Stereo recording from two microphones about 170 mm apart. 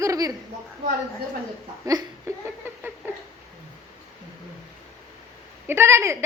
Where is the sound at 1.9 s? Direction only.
20° right (ahead or behind).